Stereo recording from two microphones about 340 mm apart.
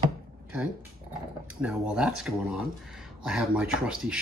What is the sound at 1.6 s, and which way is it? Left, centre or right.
Speech, centre.